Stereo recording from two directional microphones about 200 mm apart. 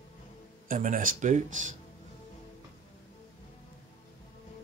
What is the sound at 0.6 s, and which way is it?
Speech, 40° right (ahead or behind).